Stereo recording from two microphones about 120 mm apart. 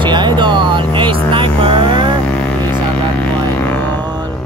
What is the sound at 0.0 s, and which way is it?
Vehicle, 40° right (ahead or behind).